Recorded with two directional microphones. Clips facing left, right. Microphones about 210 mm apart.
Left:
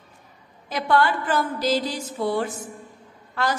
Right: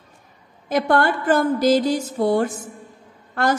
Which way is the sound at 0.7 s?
50° right (ahead or behind).